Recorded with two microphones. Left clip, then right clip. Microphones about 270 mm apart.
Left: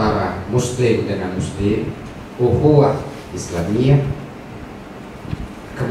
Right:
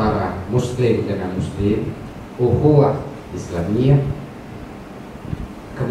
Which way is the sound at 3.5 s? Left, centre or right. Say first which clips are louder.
Left 1 dB; centre.